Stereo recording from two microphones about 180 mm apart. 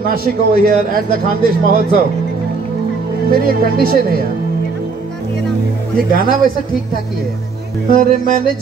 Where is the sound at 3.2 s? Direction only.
55° right (ahead or behind).